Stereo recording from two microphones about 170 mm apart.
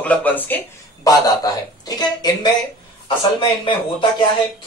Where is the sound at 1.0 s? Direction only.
20° left (ahead or behind).